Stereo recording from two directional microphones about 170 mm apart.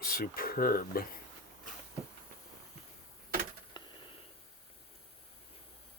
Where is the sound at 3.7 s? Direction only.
30° left (ahead or behind).